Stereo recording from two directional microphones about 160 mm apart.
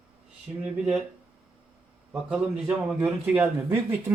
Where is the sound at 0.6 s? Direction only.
5° right (ahead or behind).